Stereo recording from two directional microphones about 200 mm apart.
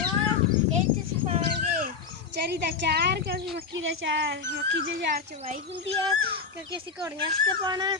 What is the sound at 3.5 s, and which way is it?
Speech, 65° right (ahead or behind).